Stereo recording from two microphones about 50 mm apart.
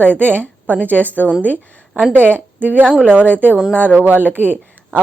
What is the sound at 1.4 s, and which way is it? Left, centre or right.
Speech, right.